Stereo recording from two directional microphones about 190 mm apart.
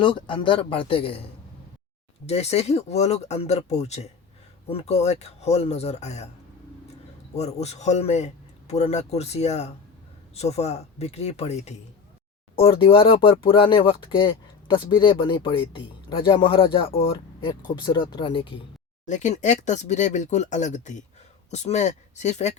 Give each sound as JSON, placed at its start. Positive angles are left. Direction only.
{"t": 0.0, "sound": "speech", "side_deg": 25}
{"t": 2.2, "sound": "a man's voice", "side_deg": 35}
{"t": 7.3, "sound": "a man's voice", "side_deg": 35}
{"t": 19.0, "sound": "a man's voice", "side_deg": 40}